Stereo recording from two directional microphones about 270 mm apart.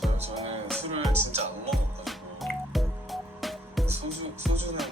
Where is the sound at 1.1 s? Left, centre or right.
Right.